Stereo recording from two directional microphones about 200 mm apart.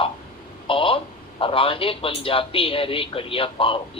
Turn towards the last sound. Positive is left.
turn(degrees=25)  # may be behind; listen again after turning